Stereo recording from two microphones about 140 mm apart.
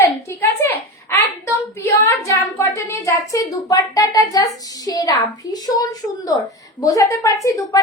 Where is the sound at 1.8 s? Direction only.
20° left (ahead or behind).